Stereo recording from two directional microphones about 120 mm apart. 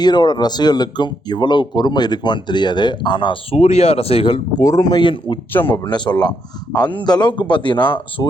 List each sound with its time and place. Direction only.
0.0 s speech: 35° left (ahead or behind)
3.5 s speech: 60° left (ahead or behind)
4.3 s speech: 30° left (ahead or behind)
5.5 s speech: 20° left (ahead or behind)
5.8 s speech: 40° left (ahead or behind)